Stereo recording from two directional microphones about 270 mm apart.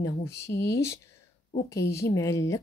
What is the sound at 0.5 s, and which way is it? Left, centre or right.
Speech, left.